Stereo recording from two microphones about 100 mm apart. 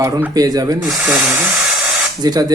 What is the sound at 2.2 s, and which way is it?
Speech, 40° right (ahead or behind).